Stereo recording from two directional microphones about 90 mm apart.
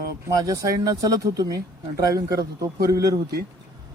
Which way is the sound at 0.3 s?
40° right (ahead or behind).